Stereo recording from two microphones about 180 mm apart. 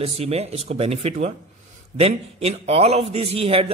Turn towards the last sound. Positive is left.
turn(degrees=-30)  # may be behind; listen again after turning